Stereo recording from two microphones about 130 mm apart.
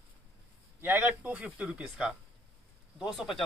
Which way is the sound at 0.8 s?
15° right (ahead or behind).